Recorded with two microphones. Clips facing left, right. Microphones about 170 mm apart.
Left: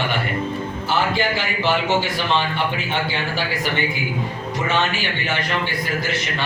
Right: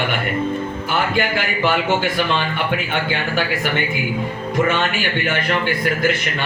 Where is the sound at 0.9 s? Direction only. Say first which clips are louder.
Right 1 dB; 55° right (ahead or behind).